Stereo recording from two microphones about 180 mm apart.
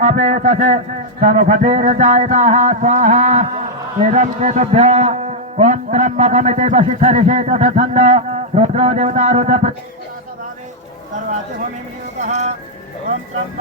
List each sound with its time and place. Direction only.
0.0 s a man's voice: 40° right (ahead or behind)
12.2 s a man's voice: 40° right (ahead or behind)